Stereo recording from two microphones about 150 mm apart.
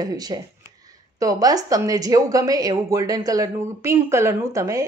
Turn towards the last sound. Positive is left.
turn(degrees=-20)  # may be behind; listen again after turning